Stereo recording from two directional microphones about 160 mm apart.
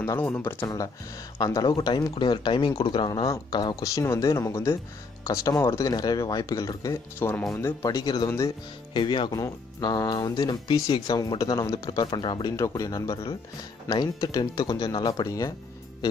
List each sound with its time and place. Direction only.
0.0 s speech: 15° left (ahead or behind)
1.4 s speech: 25° left (ahead or behind)